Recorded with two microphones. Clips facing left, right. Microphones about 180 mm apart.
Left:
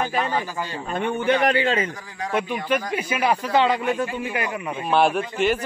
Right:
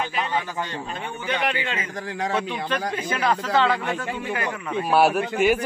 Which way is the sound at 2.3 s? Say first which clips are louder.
Left 6 dB; 10° left (ahead or behind).